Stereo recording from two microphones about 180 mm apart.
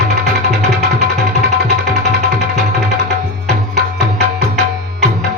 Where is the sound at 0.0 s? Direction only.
65° right (ahead or behind).